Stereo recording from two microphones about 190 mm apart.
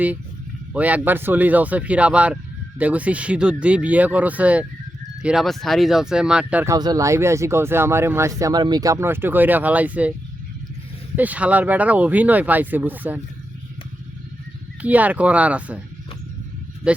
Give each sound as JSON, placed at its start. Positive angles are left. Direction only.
{"t": 0.7, "sound": "speech", "side_deg": -10}
{"t": 6.7, "sound": "speech", "side_deg": -20}
{"t": 11.2, "sound": "speech", "side_deg": -5}
{"t": 14.8, "sound": "speech", "side_deg": -10}
{"t": 16.8, "sound": "speech", "side_deg": -5}